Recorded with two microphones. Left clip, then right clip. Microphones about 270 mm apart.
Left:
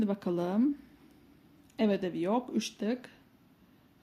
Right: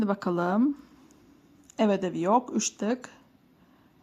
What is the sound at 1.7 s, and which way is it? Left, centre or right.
Speech, right.